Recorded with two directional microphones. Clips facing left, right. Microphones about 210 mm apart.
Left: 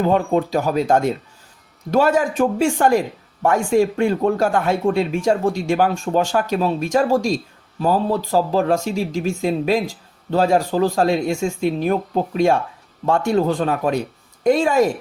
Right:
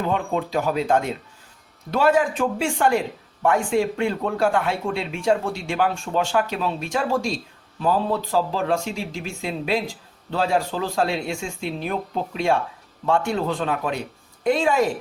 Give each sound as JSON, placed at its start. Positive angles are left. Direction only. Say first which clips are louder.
{"t": 0.0, "sound": "speech", "louder": "left 6 dB", "side_deg": 40}